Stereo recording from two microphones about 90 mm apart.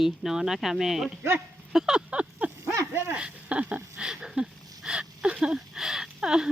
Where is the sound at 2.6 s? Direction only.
35° right (ahead or behind).